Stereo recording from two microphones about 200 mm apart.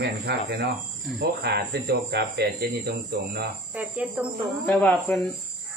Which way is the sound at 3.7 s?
10° right (ahead or behind).